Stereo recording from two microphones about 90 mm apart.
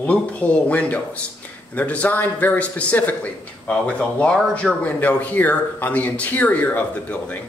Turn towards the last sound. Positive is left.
turn(degrees=15)  # may be behind; listen again after turning